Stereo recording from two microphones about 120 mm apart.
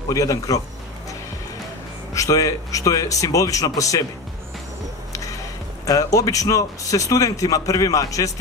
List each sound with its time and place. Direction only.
0.1 s a man's voice: 30° left (ahead or behind)
2.1 s a man's voice: 30° left (ahead or behind)
5.9 s a man's voice: 30° left (ahead or behind)